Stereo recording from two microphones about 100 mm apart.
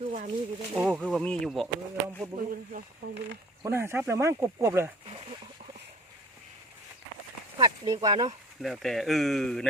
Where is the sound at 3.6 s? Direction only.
25° right (ahead or behind).